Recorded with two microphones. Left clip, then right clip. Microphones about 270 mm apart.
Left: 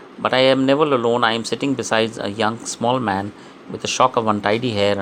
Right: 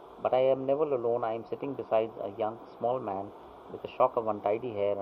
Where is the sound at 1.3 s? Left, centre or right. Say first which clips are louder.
Left 13 dB; left.